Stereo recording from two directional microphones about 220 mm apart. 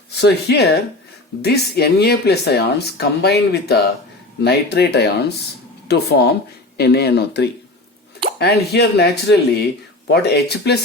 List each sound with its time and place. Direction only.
0.2 s speech: 50° left (ahead or behind)